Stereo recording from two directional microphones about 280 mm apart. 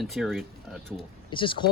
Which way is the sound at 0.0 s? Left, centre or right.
Centre.